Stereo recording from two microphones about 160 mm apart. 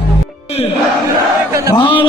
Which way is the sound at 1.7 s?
30° left (ahead or behind).